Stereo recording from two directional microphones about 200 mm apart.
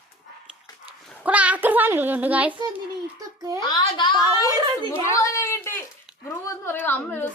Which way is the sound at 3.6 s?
20° left (ahead or behind).